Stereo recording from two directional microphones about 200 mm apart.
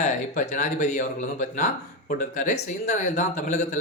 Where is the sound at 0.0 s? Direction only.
35° left (ahead or behind).